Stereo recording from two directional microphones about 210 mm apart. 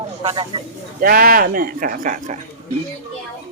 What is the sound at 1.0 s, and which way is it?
Speech, 45° right (ahead or behind).